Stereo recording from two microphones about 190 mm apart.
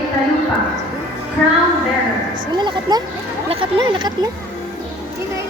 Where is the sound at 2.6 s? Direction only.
25° right (ahead or behind).